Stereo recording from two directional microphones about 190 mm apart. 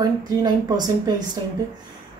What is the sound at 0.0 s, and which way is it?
Speech, 20° right (ahead or behind).